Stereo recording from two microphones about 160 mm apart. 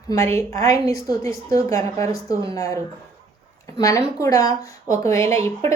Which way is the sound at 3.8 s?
20° left (ahead or behind).